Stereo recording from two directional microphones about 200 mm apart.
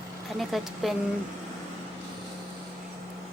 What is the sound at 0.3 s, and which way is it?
Speech, centre (ahead or behind).